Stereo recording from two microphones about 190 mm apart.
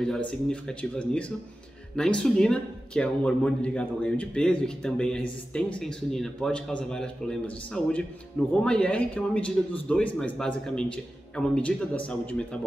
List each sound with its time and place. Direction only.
0.0 s speech: 5° left (ahead or behind)